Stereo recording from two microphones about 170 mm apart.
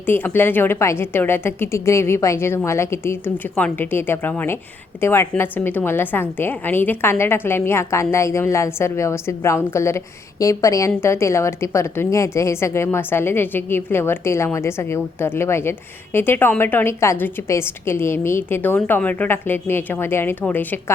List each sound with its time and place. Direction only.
0.0 s a woman's voice: 10° left (ahead or behind)